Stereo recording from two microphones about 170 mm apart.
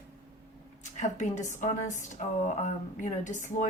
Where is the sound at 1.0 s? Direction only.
45° left (ahead or behind).